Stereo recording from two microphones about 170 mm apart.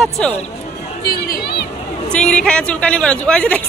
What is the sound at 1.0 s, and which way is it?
Chatter, 60° left (ahead or behind).